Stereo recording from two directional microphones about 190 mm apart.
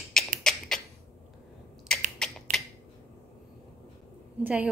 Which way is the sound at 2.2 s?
Centre (ahead or behind).